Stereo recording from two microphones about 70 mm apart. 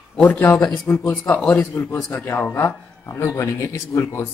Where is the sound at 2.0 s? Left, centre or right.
Left.